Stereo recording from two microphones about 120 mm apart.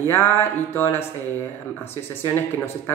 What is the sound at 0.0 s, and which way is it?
Speech, 20° left (ahead or behind).